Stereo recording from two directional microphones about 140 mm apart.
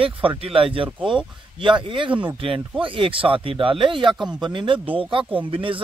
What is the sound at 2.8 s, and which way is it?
Speech, 35° right (ahead or behind).